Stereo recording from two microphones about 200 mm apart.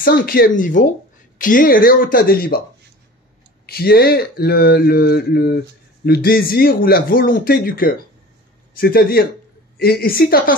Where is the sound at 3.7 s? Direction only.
50° left (ahead or behind).